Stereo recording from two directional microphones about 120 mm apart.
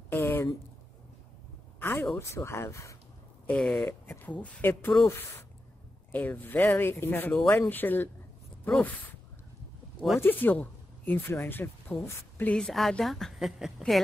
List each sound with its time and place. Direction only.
0.1 s a sound: 20° left (ahead or behind)
1.8 s speech: 20° left (ahead or behind)
3.4 s speech: 10° left (ahead or behind)
9.9 s speech: centre (ahead or behind)
10.2 s speech: 15° left (ahead or behind); by 14.0 s centre (ahead or behind)